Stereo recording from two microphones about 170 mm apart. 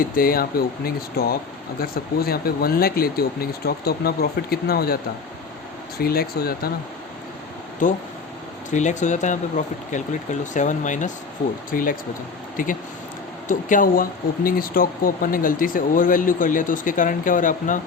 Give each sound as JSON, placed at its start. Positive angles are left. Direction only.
{"t": 0.0, "sound": "speech", "side_deg": 60}
{"t": 6.0, "sound": "speech", "side_deg": 65}
{"t": 7.8, "sound": "speech", "side_deg": 50}